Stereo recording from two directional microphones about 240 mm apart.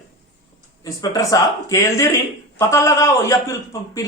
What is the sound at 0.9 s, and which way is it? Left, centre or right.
A woman's voice, centre.